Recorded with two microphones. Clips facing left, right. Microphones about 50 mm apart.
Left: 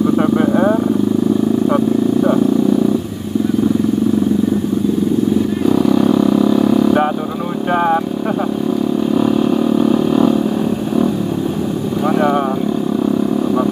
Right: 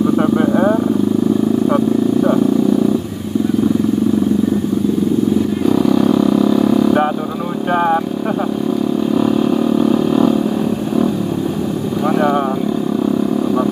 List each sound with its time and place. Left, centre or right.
0.0 s vehicle: centre
5.7 s vehicle: centre
9.1 s vehicle: centre
12.0 s vehicle: centre